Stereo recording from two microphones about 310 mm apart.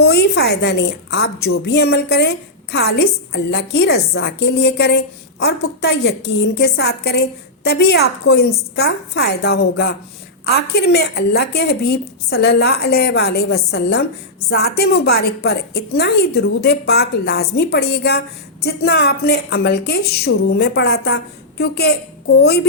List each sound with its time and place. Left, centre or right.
0.0 s a woman's voice: left
22.4 s a woman's voice: left